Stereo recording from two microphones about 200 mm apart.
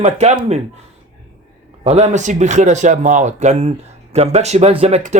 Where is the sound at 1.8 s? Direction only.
35° right (ahead or behind).